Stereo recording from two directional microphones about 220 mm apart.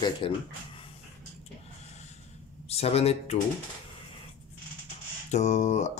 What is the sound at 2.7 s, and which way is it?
Speech, 30° left (ahead or behind).